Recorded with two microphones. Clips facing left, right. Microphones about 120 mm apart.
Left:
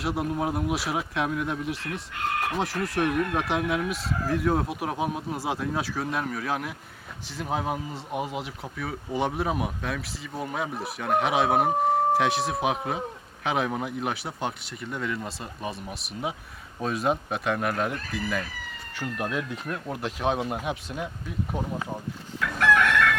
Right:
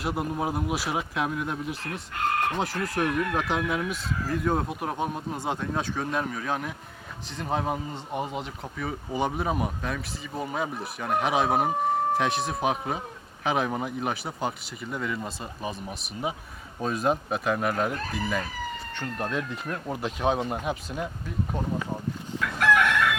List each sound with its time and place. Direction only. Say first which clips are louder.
0.0 s speech: left 1 dB; centre (ahead or behind)
1.8 s speech: right 2 dB; 35° right (ahead or behind)
2.5 s speech: even; centre (ahead or behind)
22.5 s chicken: left 1 dB; 10° right (ahead or behind)